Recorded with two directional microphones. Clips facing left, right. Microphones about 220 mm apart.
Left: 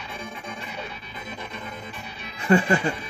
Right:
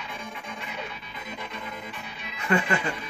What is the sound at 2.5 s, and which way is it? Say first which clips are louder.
Speech: left 6 dB; 30° left (ahead or behind).